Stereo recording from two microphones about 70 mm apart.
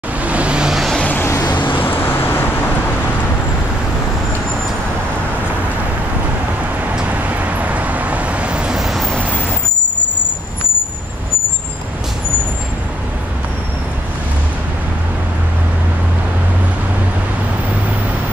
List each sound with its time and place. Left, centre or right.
0.2 s vehicle: centre
1.2 s vehicle: left
7.0 s vehicle: right; by 9.2 s centre